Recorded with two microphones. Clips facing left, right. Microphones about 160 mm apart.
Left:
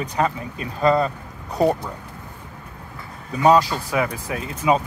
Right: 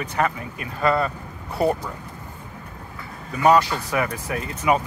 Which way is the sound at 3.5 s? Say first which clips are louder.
Left 1 dB; 15° left (ahead or behind).